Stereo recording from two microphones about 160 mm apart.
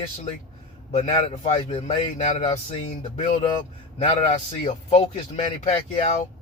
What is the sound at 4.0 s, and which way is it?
A man's voice, 40° left (ahead or behind).